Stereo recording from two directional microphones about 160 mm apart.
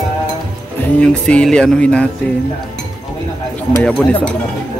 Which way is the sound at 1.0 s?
5° left (ahead or behind).